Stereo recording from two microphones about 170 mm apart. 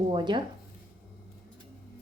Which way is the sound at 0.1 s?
25° right (ahead or behind).